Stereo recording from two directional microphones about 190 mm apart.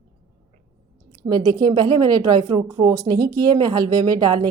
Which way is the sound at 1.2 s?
20° right (ahead or behind).